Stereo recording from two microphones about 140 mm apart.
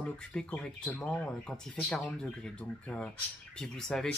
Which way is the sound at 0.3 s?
5° left (ahead or behind).